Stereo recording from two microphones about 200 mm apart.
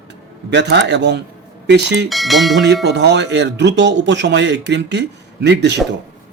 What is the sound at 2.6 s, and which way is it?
Speech, 55° right (ahead or behind).